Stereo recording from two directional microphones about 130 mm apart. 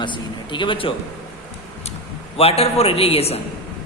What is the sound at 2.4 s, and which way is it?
A man's voice, 50° left (ahead or behind).